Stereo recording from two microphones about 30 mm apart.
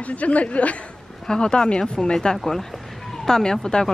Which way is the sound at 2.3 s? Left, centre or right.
Centre.